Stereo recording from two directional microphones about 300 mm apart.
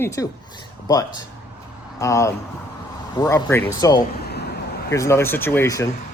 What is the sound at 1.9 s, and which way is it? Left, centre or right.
Speech, centre.